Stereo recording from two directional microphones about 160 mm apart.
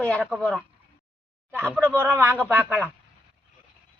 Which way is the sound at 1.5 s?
15° right (ahead or behind).